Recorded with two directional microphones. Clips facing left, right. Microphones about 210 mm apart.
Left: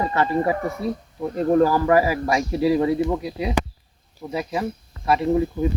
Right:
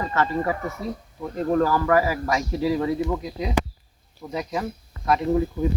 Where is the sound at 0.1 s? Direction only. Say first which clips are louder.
Left 3 dB; 15° left (ahead or behind).